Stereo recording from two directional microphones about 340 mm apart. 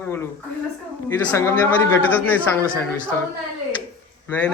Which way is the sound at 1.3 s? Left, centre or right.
Centre.